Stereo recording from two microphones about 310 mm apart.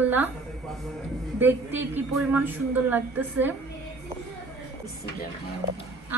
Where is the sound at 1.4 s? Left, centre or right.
Centre.